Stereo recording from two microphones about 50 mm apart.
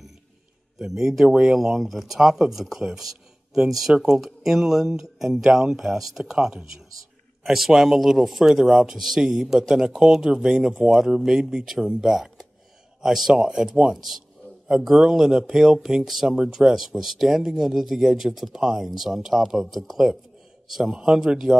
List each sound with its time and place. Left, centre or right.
0.7 s speech: centre
7.4 s speech: centre
15.0 s speech: centre